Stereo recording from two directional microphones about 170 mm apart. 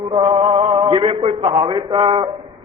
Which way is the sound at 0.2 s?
35° right (ahead or behind).